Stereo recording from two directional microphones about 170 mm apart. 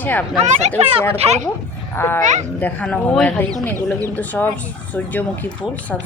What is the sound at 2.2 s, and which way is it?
Speech, 45° right (ahead or behind).